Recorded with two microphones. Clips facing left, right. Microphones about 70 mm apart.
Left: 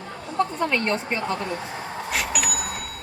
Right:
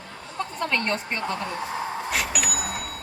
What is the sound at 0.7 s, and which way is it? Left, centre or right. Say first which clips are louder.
Speech: left 2 dB; centre.